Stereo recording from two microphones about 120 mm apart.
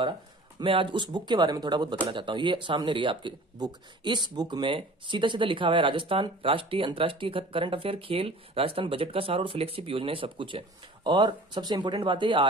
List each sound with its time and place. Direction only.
0.6 s speech: 45° right (ahead or behind)